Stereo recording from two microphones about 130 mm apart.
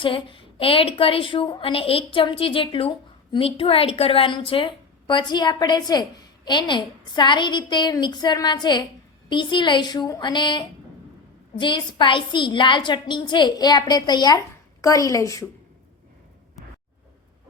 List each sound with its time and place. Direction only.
0.0 s a woman's voice: 40° left (ahead or behind); by 15.4 s 25° left (ahead or behind)